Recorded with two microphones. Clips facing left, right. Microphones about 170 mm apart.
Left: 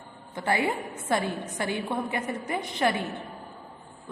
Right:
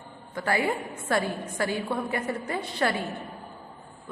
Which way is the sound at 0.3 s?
20° left (ahead or behind).